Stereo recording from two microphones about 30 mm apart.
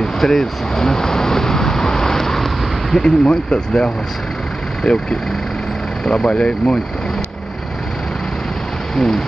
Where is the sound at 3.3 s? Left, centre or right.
Left.